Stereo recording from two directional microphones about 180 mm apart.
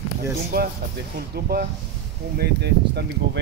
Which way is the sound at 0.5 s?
60° right (ahead or behind).